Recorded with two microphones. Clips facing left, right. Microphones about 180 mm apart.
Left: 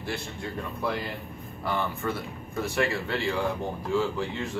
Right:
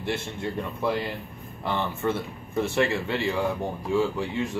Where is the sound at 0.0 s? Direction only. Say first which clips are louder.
Right 4 dB; 20° right (ahead or behind).